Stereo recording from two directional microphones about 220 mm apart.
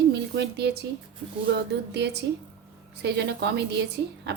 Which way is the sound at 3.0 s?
50° right (ahead or behind).